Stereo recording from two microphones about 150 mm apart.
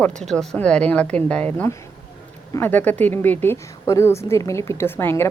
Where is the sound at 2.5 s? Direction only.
10° left (ahead or behind).